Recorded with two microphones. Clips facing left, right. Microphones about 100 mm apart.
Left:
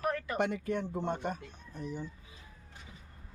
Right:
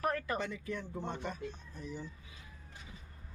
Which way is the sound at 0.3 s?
65° left (ahead or behind).